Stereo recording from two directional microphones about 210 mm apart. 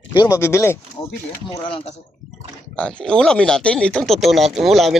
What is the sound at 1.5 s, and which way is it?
Speech, 25° left (ahead or behind).